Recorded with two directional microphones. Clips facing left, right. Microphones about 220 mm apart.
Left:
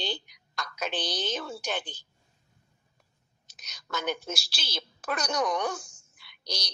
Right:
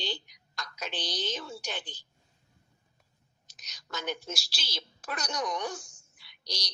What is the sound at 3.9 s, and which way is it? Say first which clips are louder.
A woman's voice: left 4 dB; 60° left (ahead or behind).